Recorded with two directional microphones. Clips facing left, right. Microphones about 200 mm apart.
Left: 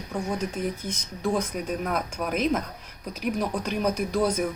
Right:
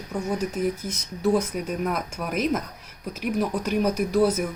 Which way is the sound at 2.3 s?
5° right (ahead or behind).